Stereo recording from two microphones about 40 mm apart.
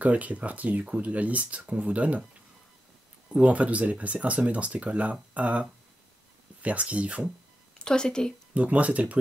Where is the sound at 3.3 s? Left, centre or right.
Right.